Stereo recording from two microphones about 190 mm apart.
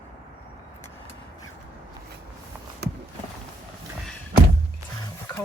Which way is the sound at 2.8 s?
60° right (ahead or behind).